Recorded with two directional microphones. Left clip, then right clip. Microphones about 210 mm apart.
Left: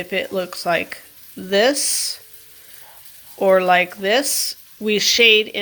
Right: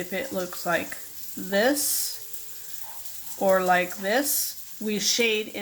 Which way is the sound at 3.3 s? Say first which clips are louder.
Left 7 dB; 30° left (ahead or behind).